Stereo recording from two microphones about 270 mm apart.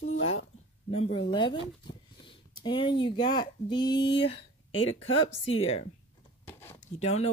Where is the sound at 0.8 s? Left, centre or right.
Left.